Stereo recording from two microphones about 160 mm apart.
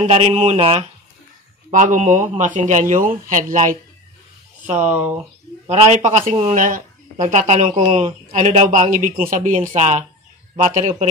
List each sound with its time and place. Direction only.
0.0 s speech: 40° right (ahead or behind)
1.7 s speech: 50° right (ahead or behind)
4.9 s speech: 10° right (ahead or behind)
5.7 s speech: 50° right (ahead or behind)
6.5 s speech: 55° right (ahead or behind)
8.9 s speech: 60° right (ahead or behind)